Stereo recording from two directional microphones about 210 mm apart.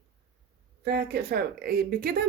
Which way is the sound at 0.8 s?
50° right (ahead or behind).